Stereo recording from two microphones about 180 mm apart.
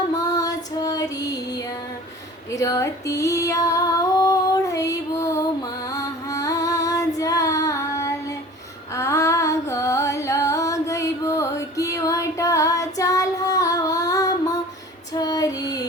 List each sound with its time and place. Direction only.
0.1 s music: 20° left (ahead or behind)
2.5 s female singing: 20° left (ahead or behind)
5.9 s child singing: 20° left (ahead or behind)
9.0 s a sound: 15° left (ahead or behind)
15.1 s female singing: 20° left (ahead or behind)